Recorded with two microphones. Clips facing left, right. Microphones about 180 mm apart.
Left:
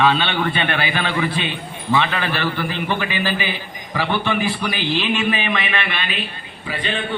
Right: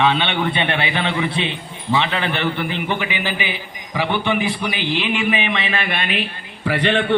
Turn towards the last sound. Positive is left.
turn(degrees=-70)  # may be behind; listen again after turning